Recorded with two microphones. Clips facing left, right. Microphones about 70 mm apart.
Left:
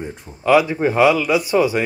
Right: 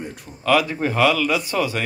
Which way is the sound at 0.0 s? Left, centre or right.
Centre.